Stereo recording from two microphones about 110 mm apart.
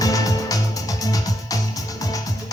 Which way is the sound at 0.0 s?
30° left (ahead or behind).